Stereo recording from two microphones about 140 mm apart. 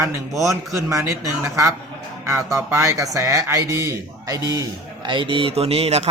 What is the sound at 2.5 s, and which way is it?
A man's voice, 20° right (ahead or behind).